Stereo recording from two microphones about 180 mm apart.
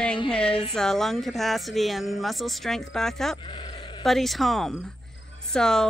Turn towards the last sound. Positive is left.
turn(degrees=5)  # may be behind; listen again after turning